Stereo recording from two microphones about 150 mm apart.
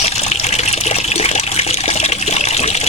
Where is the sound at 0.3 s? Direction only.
45° left (ahead or behind).